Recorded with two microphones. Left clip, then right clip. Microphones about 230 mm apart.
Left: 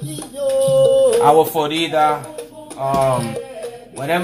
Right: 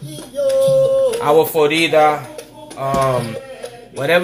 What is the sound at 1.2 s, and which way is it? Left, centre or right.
Speech, right.